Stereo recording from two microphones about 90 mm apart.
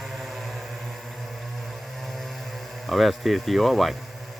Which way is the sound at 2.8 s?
Centre (ahead or behind).